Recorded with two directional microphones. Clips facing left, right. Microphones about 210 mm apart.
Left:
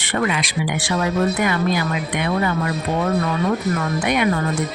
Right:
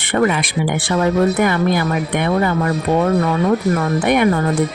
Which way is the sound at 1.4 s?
55° right (ahead or behind).